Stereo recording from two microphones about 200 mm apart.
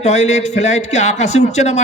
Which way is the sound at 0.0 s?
35° left (ahead or behind).